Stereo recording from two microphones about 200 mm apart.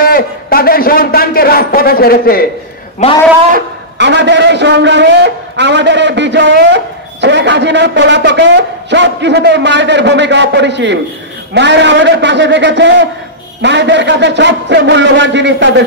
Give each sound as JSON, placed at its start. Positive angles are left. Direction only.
{"t": 0.0, "sound": "a man's voice", "side_deg": 50}
{"t": 3.0, "sound": "a man's voice", "side_deg": 35}
{"t": 3.5, "sound": "a man's voice", "side_deg": -60}